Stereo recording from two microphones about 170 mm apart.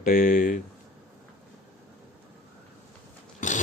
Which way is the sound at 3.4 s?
45° left (ahead or behind).